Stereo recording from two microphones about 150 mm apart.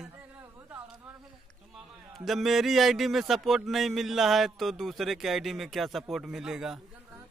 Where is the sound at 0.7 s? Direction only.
10° right (ahead or behind).